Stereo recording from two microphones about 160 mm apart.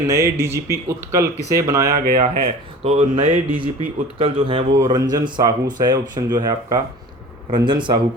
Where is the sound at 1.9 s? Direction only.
60° right (ahead or behind).